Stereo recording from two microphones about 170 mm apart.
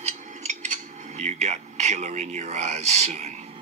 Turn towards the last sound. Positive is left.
turn(degrees=-40)  # may be behind; listen again after turning